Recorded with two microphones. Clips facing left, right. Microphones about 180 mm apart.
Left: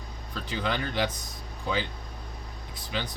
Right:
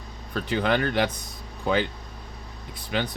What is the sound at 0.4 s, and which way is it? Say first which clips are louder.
Speech: right 7 dB; 60° right (ahead or behind).